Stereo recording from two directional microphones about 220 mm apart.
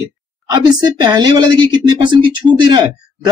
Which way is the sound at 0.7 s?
20° right (ahead or behind).